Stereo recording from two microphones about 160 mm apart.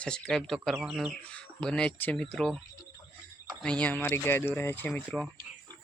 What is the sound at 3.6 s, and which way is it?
Speech, 10° left (ahead or behind).